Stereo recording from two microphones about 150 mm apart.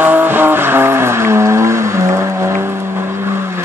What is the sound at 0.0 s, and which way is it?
Vehicle, 15° right (ahead or behind).